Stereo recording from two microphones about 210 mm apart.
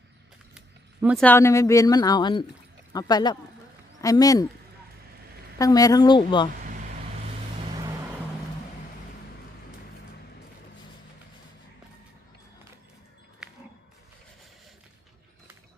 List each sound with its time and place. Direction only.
1.0 s a woman's voice: 5° left (ahead or behind)
5.5 s a woman's voice: 15° left (ahead or behind)
13.4 s a sound: 5° right (ahead or behind)